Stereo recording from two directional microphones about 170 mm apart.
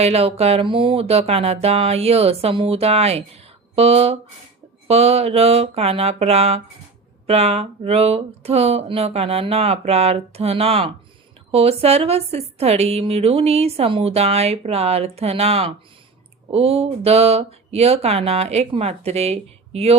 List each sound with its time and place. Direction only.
0.0 s speech: 35° right (ahead or behind)